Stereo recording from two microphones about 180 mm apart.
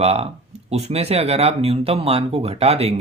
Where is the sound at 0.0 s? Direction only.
35° right (ahead or behind).